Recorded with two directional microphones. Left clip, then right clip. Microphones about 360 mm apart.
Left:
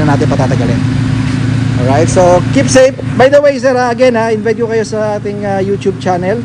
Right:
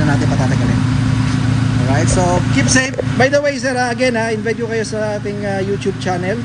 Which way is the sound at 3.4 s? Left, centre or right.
Centre.